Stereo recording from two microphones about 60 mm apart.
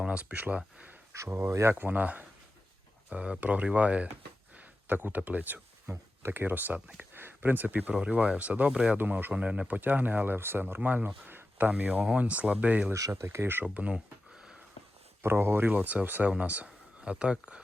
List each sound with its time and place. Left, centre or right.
0.0 s speech: right
1.3 s speech: right
1.7 s speech: right
5.8 s speech: right
6.7 s speech: centre
7.1 s speech: right
12.9 s speech: right
13.2 s speech: right
13.7 s speech: right
15.2 s speech: right; by 17.6 s centre